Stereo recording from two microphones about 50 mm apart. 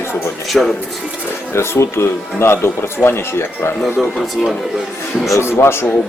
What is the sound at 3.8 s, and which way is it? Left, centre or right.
Speech, centre.